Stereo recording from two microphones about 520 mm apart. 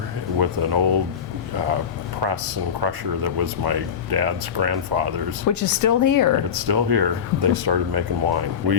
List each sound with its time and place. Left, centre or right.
0.3 s speech: right
2.8 s speech: right
5.5 s speech: left
6.7 s speech: right